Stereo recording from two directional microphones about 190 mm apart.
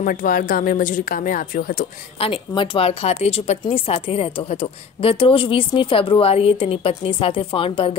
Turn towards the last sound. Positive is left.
turn(degrees=30)  # may be behind; listen again after turning